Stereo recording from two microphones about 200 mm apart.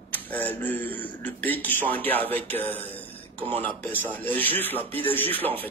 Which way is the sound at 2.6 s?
30° right (ahead or behind).